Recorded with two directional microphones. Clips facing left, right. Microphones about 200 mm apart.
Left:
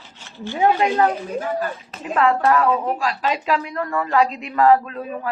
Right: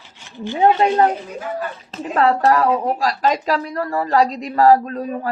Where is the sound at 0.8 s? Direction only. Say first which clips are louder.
Right 3 dB; 35° right (ahead or behind).